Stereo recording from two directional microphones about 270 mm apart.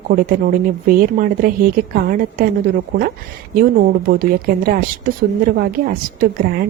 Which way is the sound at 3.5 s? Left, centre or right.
Right.